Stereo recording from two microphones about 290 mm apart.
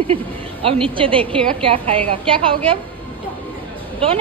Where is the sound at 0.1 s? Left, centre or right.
Centre.